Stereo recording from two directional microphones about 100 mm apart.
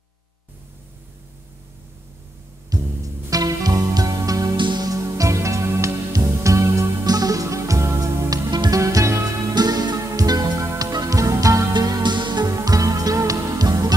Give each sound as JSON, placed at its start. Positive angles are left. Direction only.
{"t": 2.7, "sound": "music", "side_deg": -40}
{"t": 4.6, "sound": "music", "side_deg": -50}
{"t": 4.8, "sound": "music", "side_deg": -35}
{"t": 9.5, "sound": "music", "side_deg": -40}
{"t": 11.7, "sound": "music", "side_deg": -45}